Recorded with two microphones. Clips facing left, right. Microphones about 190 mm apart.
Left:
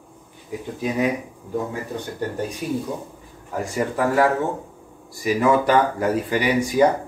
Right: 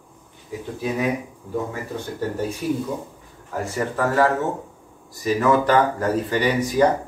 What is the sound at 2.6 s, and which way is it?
A man's voice, 15° left (ahead or behind).